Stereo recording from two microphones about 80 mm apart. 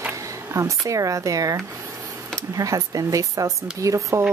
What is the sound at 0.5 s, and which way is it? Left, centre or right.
Speech, right.